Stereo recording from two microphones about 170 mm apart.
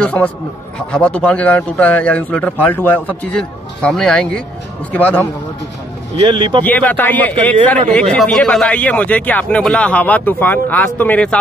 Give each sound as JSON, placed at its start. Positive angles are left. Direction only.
{"t": 0.0, "sound": "speech", "side_deg": 10}
{"t": 6.2, "sound": "speech", "side_deg": -25}
{"t": 6.6, "sound": "speech", "side_deg": 10}